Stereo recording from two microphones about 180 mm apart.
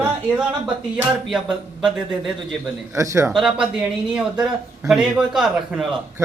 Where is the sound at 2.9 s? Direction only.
15° right (ahead or behind).